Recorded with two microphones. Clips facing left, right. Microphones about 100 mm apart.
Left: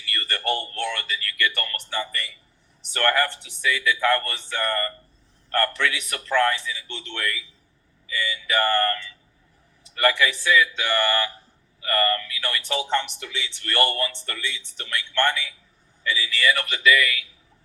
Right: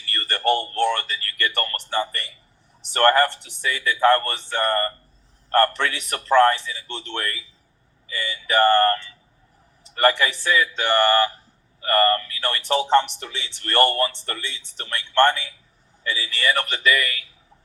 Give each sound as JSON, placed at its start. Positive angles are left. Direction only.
{"t": 0.0, "sound": "speech", "side_deg": -35}